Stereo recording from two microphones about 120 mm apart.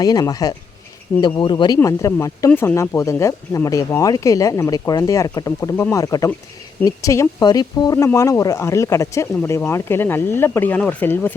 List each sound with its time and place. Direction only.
0.0 s speech: 30° left (ahead or behind); by 11.3 s 15° left (ahead or behind)